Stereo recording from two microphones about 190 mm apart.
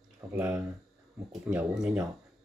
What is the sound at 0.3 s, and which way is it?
Speech, 15° right (ahead or behind).